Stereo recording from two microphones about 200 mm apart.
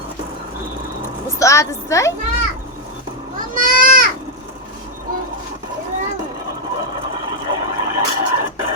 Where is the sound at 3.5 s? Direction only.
45° right (ahead or behind).